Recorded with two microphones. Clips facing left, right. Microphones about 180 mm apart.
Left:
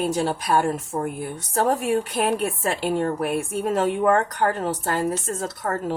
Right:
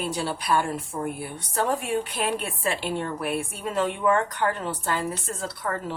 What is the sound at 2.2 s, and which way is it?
A woman's voice, 45° left (ahead or behind).